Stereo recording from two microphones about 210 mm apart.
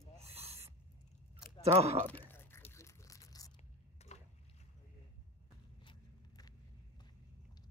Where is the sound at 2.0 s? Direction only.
10° left (ahead or behind).